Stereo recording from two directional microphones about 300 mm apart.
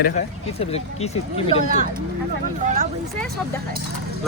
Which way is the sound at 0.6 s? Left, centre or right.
Left.